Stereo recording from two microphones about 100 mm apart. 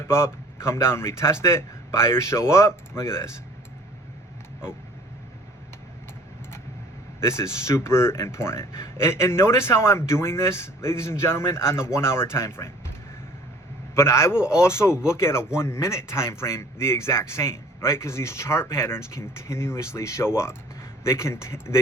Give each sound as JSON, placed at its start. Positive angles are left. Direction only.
{"t": 0.1, "sound": "speech", "side_deg": 25}
{"t": 7.2, "sound": "speech", "side_deg": 30}
{"t": 13.9, "sound": "speech", "side_deg": 25}